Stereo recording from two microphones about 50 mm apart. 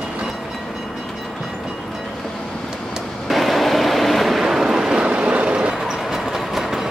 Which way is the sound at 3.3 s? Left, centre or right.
Centre.